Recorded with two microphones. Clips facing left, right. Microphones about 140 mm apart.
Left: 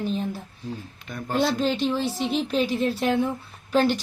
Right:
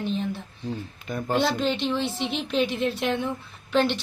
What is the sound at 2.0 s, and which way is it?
Speech, 40° left (ahead or behind).